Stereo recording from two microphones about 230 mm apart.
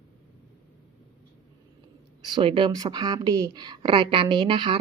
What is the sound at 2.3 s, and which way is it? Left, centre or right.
A woman's voice, right.